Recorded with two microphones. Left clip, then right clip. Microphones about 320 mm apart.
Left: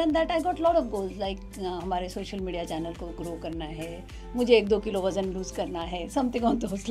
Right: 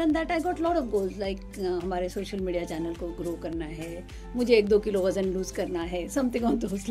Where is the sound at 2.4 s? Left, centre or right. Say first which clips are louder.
Right 1 dB; centre.